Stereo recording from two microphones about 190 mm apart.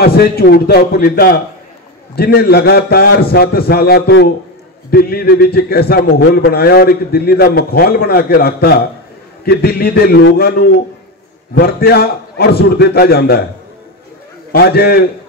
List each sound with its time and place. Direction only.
0.0 s a man's voice: 55° left (ahead or behind)
14.5 s a man's voice: 55° left (ahead or behind)